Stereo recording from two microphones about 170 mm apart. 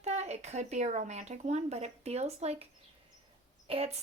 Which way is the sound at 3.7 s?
35° right (ahead or behind).